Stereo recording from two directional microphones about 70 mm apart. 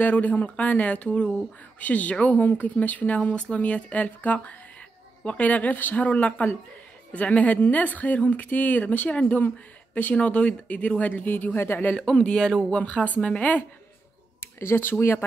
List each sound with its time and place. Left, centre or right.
0.0 s speech: left
11.9 s speech: centre
12.8 s speech: left
14.4 s speech: left